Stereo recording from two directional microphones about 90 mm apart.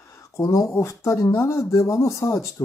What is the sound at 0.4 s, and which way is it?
Speech, 35° left (ahead or behind).